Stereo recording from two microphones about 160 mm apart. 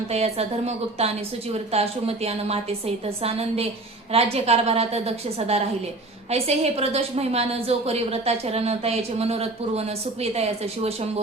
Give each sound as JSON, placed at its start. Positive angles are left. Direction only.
{"t": 0.1, "sound": "a woman's voice", "side_deg": -40}